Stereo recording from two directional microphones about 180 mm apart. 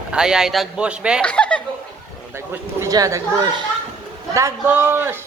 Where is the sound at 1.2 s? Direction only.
5° left (ahead or behind).